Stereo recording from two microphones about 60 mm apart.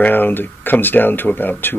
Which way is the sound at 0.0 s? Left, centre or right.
Left.